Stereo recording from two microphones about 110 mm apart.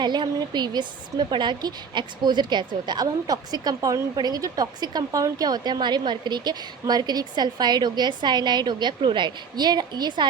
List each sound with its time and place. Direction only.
0.0 s a woman's voice: 40° right (ahead or behind)